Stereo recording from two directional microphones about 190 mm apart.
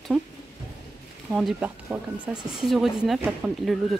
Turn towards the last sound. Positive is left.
turn(degrees=0)  # may be behind; listen again after turning